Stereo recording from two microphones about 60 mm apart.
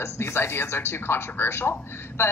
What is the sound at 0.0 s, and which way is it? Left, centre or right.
A woman's voice, left.